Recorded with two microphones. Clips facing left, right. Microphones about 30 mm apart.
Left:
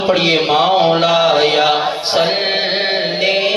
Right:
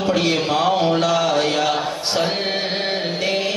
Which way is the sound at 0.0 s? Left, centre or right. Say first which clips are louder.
Left 5 dB; left.